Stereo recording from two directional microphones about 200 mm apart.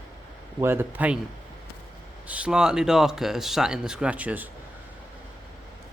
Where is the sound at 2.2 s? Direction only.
5° right (ahead or behind).